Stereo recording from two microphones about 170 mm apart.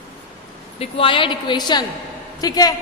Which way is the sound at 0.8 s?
35° left (ahead or behind).